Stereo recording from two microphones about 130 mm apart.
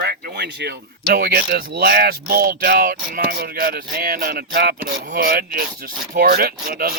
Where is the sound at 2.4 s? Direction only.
90° right.